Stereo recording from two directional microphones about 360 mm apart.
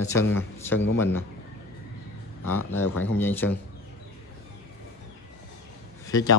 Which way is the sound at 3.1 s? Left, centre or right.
Centre.